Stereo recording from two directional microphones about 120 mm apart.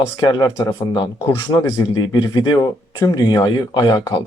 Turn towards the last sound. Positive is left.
turn(degrees=35)  # may be behind; listen again after turning